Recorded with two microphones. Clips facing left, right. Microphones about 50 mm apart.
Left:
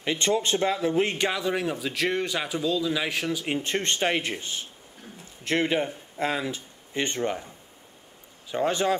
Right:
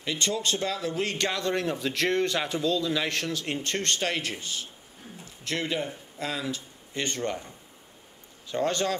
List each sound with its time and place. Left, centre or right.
0.0 s speech: left
8.5 s speech: centre